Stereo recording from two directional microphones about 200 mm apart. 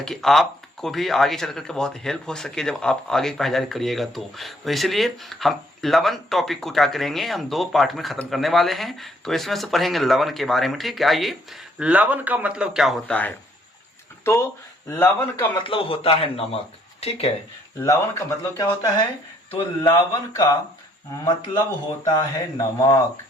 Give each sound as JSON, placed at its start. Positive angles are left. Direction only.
{"t": 0.0, "sound": "speech", "side_deg": 0}
{"t": 15.6, "sound": "speech", "side_deg": 25}
{"t": 17.7, "sound": "speech", "side_deg": 15}